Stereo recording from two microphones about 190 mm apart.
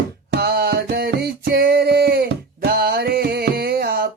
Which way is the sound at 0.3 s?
55° right (ahead or behind).